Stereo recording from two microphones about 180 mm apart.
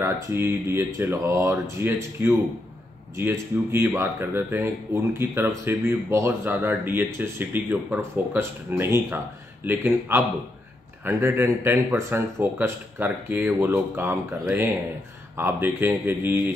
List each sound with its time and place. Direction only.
0.0 s speech: 15° right (ahead or behind)
15.3 s speech: 10° right (ahead or behind)